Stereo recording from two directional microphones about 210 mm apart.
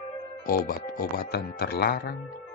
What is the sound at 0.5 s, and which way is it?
Speech, 45° left (ahead or behind).